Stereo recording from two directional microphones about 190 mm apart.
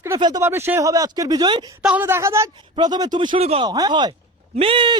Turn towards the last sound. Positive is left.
turn(degrees=-25)  # may be behind; listen again after turning